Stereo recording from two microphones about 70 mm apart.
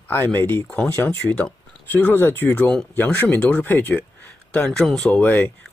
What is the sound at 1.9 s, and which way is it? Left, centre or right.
Speech, left.